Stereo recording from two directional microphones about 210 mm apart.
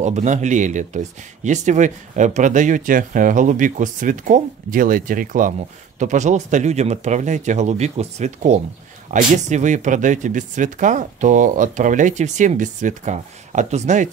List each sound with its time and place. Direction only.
0.0 s speech: 35° right (ahead or behind)